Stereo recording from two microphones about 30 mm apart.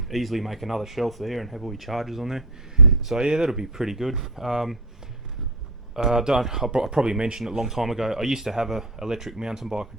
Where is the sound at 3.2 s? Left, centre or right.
Right.